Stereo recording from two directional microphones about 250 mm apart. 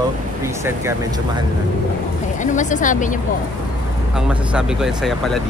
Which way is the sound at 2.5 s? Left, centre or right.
Left.